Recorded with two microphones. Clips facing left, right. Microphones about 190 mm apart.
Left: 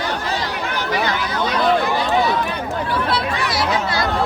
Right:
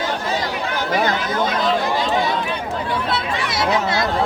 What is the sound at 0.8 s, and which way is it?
Chatter, 50° right (ahead or behind).